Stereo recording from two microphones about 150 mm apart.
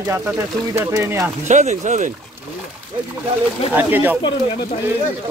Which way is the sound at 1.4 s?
55° right (ahead or behind).